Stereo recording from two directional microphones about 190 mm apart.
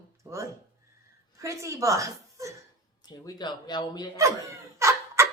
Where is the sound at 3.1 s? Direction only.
20° left (ahead or behind).